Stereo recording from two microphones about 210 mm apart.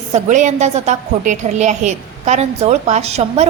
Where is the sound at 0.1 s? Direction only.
35° right (ahead or behind).